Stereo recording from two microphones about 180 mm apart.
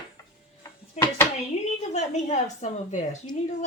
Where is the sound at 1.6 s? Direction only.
40° left (ahead or behind).